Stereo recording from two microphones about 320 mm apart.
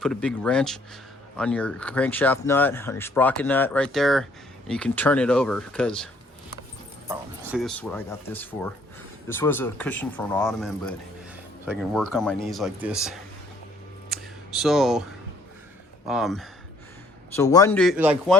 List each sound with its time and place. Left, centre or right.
0.0 s speech: centre
7.1 s speech: centre
14.1 s a sound: centre
16.0 s speech: centre